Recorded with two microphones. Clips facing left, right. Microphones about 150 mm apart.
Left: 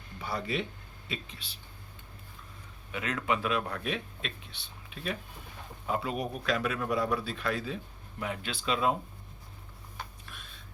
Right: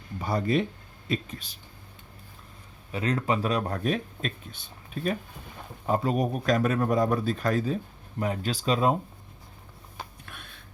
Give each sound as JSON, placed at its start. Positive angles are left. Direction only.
{"t": 0.2, "sound": "speech", "side_deg": -45}
{"t": 2.9, "sound": "speech", "side_deg": -35}
{"t": 10.2, "sound": "a sound", "side_deg": -60}